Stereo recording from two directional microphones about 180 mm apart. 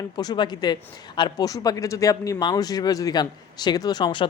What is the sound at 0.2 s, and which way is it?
Speech, 25° left (ahead or behind).